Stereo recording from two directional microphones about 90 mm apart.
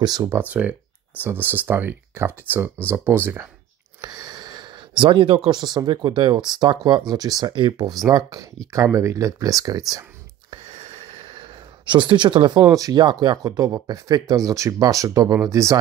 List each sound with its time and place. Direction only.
0.4 s speech: 15° right (ahead or behind)
4.0 s a sound: 45° right (ahead or behind); by 5.4 s 75° right (ahead or behind)
5.4 s speech: 55° right (ahead or behind)
11.1 s a sound: 90° right; by 12.6 s 60° right (ahead or behind)
12.6 s speech: 40° right (ahead or behind)
13.0 s speech: 55° right (ahead or behind); by 15.8 s 40° right (ahead or behind)